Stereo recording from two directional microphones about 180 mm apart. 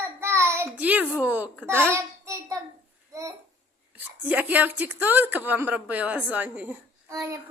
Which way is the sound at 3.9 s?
10° right (ahead or behind).